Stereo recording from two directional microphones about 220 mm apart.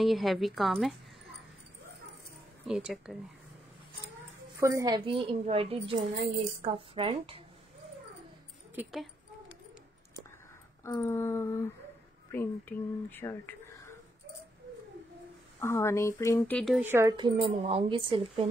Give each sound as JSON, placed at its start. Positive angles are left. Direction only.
{"t": 0.0, "sound": "a woman's voice", "side_deg": 0}
{"t": 2.6, "sound": "a woman's voice", "side_deg": 0}
{"t": 4.6, "sound": "a woman's voice", "side_deg": -15}
{"t": 10.8, "sound": "speech", "side_deg": 10}
{"t": 15.6, "sound": "speech", "side_deg": 10}
{"t": 16.9, "sound": "speech", "side_deg": -15}
{"t": 17.4, "sound": "a woman's voice", "side_deg": -25}